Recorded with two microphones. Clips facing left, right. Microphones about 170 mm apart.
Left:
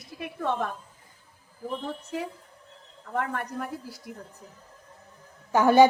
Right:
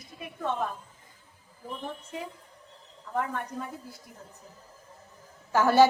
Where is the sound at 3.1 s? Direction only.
75° left (ahead or behind).